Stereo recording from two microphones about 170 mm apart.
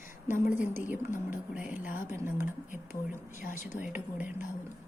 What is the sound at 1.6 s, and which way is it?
Speech, 10° right (ahead or behind).